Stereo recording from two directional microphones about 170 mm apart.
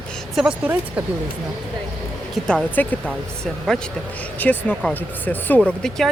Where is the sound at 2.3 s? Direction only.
Centre (ahead or behind).